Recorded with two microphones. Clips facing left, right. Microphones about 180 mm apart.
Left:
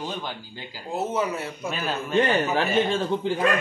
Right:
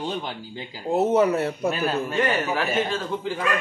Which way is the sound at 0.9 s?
60° right (ahead or behind).